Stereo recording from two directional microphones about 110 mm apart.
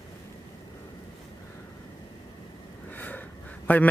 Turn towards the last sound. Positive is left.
turn(degrees=15)  # may be behind; listen again after turning